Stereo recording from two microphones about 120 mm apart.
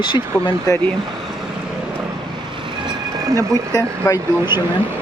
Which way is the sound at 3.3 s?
25° right (ahead or behind).